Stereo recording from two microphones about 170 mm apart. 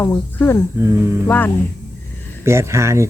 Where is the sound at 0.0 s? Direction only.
15° left (ahead or behind).